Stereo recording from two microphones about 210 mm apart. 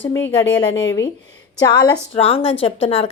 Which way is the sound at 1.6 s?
15° left (ahead or behind).